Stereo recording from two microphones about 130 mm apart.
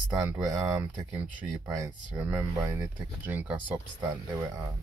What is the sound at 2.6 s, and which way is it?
Speech, 25° right (ahead or behind).